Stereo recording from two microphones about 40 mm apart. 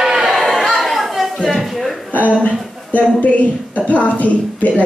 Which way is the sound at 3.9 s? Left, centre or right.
Left.